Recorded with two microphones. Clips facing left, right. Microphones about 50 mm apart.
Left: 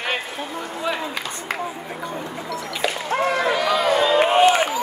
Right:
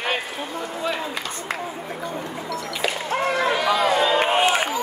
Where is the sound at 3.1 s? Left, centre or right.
Centre.